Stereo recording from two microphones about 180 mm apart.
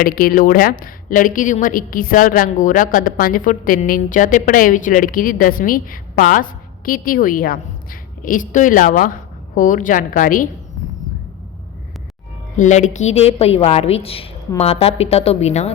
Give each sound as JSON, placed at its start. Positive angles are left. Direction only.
{"t": 0.0, "sound": "a woman's voice", "side_deg": 55}
{"t": 12.5, "sound": "a woman's voice", "side_deg": 40}